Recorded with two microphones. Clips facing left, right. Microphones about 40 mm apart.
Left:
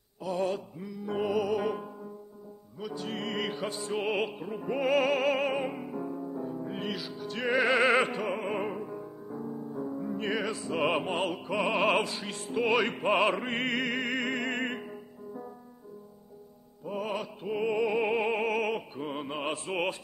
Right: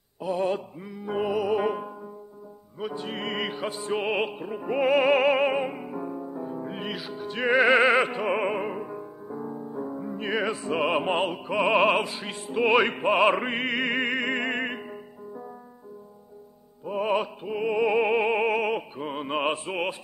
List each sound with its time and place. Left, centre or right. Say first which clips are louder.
0.5 s music: right 5 dB; right
1.1 s music: right 3 dB; centre
1.5 s music: right 5 dB; right
10.7 s opera: right 3 dB; right
11.2 s music: right 5 dB; centre
13.0 s music: right 5 dB; centre
13.8 s music: right 5 dB; right
14.5 s music: right 3 dB; centre
16.8 s music: right 6 dB; right
17.4 s opera: right 3 dB; centre
19.2 s music: right 7 dB; right
19.7 s music: right 2 dB; centre